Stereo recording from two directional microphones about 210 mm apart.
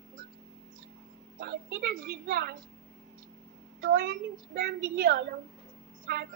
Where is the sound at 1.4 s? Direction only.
45° right (ahead or behind).